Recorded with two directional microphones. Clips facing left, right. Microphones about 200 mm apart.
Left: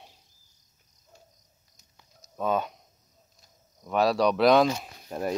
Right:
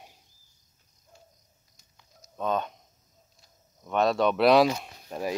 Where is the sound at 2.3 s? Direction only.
5° left (ahead or behind).